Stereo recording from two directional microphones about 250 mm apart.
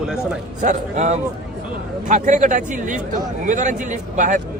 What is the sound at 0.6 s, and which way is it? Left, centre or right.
A man's voice, right.